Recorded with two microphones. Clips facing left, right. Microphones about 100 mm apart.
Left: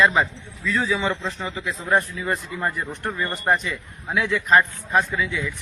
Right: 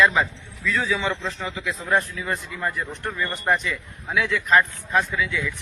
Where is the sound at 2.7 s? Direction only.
5° left (ahead or behind).